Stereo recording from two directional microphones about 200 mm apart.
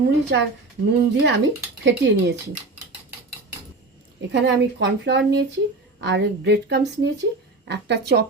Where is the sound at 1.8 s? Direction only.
60° right (ahead or behind).